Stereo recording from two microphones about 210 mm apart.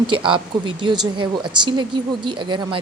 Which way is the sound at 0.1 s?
25° right (ahead or behind).